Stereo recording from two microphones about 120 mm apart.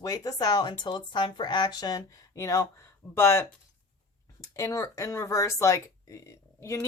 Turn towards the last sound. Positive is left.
turn(degrees=25)  # may be behind; listen again after turning